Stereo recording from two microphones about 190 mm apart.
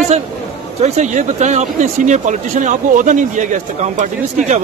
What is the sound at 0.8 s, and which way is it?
Speech, 40° right (ahead or behind).